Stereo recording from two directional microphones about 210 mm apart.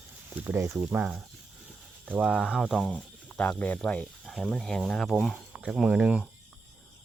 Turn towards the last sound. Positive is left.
turn(degrees=-5)  # may be behind; listen again after turning